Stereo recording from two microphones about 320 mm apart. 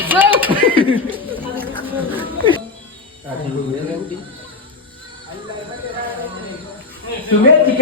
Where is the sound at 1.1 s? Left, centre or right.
Centre.